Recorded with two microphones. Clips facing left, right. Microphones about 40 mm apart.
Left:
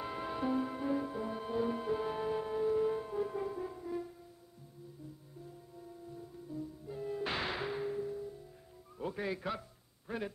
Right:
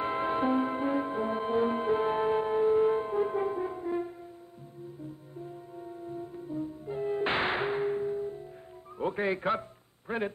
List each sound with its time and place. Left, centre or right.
0.0 s music: right
5.8 s music: right
8.9 s a sound: right